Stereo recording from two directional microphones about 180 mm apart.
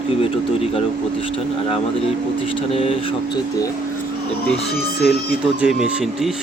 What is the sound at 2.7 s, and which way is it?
Speech, 35° left (ahead or behind).